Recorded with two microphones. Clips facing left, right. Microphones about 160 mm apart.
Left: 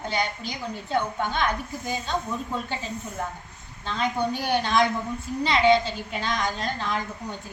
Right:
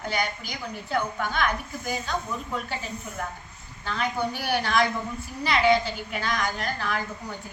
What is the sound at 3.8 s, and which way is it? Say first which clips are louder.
A woman's voice: left 2 dB; 20° left (ahead or behind).